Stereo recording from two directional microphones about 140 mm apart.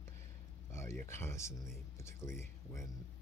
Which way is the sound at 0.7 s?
20° left (ahead or behind).